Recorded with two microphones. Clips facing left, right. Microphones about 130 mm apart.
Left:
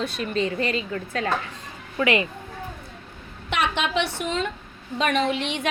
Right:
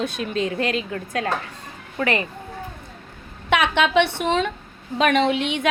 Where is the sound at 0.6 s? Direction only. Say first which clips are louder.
Right 2 dB; 80° right.